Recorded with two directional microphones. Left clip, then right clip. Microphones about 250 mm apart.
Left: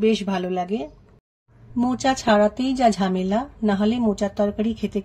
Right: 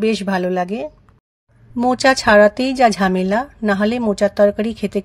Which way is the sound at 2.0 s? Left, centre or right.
Right.